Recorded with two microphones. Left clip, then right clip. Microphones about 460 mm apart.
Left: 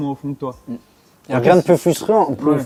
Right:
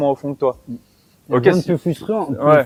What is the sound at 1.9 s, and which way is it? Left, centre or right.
Speech, left.